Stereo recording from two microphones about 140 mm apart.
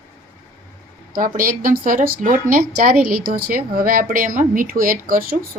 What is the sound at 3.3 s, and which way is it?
Speech, 90° right.